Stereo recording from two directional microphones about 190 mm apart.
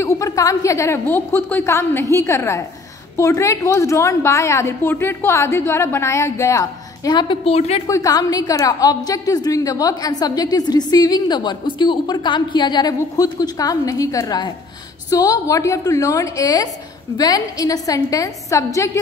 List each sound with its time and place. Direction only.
0.0 s a woman's voice: 15° left (ahead or behind); by 7.8 s 35° left (ahead or behind)
7.8 s a woman's voice: 20° left (ahead or behind)